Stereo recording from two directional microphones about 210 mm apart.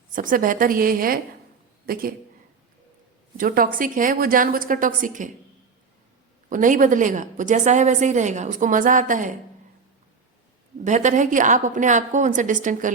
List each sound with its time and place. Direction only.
0.2 s a woman's voice: 40° right (ahead or behind)
3.3 s a woman's voice: 40° right (ahead or behind)
6.5 s a woman's voice: 40° right (ahead or behind)
10.8 s a woman's voice: 35° right (ahead or behind)